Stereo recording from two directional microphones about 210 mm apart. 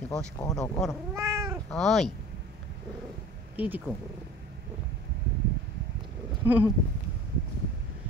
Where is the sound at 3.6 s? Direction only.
5° right (ahead or behind).